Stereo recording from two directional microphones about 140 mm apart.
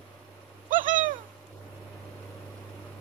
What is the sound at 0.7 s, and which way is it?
Owl, 70° right (ahead or behind).